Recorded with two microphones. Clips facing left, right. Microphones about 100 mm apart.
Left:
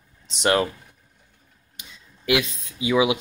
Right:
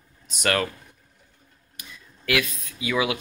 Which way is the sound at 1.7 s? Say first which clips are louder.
Right 1 dB; 20° left (ahead or behind).